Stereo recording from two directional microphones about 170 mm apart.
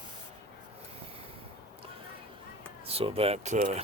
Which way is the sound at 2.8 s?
35° right (ahead or behind).